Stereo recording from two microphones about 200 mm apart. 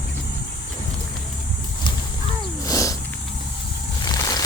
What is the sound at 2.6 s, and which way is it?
Cricket, 15° left (ahead or behind).